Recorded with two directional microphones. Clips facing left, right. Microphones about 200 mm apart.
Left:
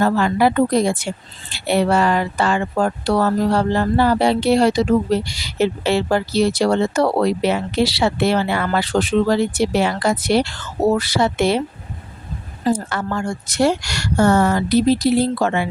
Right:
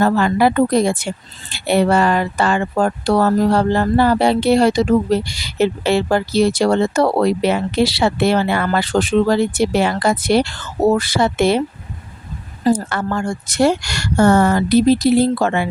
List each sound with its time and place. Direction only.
0.0 s speech: 55° right (ahead or behind)
12.7 s speech: 55° right (ahead or behind)